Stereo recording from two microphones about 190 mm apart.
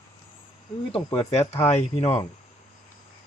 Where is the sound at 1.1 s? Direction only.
35° left (ahead or behind).